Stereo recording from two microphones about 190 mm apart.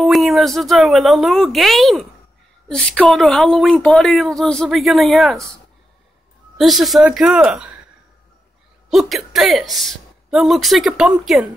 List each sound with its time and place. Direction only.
0.0 s a woman's voice: centre (ahead or behind)
6.6 s a woman's voice: centre (ahead or behind)
8.9 s a woman's voice: centre (ahead or behind)